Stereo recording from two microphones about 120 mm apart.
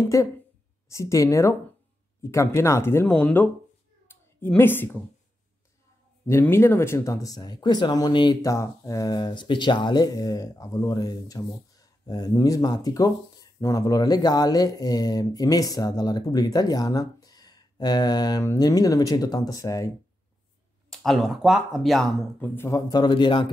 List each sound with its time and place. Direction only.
0.1 s speech: 25° left (ahead or behind)
4.1 s cat: 20° left (ahead or behind)
4.5 s a woman's voice: 15° left (ahead or behind)
6.2 s speech: 20° left (ahead or behind); by 8.4 s 40° left (ahead or behind)
8.4 s speech: 25° left (ahead or behind)
20.9 s speech: centre (ahead or behind)
22.4 s speech: 25° left (ahead or behind); by 23.5 s 45° left (ahead or behind)